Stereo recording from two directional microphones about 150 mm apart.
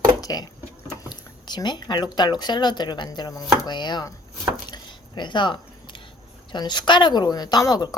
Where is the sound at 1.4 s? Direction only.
30° left (ahead or behind).